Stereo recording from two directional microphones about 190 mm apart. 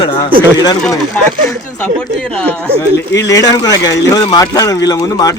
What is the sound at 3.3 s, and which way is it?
Speech, 20° left (ahead or behind).